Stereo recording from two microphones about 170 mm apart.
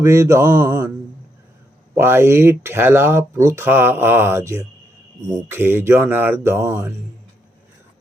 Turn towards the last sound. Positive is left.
turn(degrees=-20)  # may be behind; listen again after turning